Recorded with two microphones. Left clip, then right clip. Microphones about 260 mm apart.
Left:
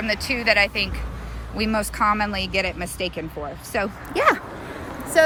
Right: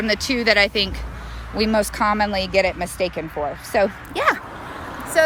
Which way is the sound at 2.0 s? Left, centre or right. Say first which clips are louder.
Left 2 dB; centre.